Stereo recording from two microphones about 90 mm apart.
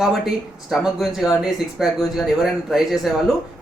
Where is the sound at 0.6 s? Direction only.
Centre (ahead or behind).